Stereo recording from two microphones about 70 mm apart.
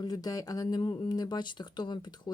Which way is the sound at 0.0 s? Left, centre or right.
Left.